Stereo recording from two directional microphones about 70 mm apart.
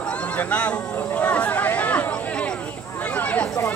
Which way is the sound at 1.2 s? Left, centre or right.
Centre.